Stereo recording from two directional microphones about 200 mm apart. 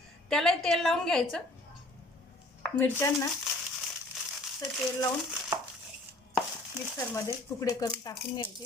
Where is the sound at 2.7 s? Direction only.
10° left (ahead or behind).